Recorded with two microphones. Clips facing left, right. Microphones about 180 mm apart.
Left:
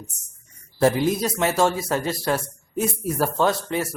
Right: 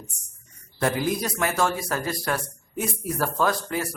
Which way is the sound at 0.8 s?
25° left (ahead or behind).